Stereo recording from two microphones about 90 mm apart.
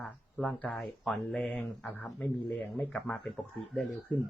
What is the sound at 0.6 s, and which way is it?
Speech, 15° left (ahead or behind).